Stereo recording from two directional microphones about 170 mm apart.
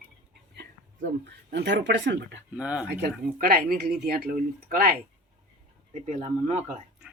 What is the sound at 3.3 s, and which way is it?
Speech, 60° right (ahead or behind).